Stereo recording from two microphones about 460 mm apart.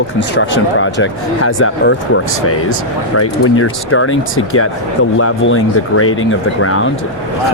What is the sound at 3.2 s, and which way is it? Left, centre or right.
Speech, left.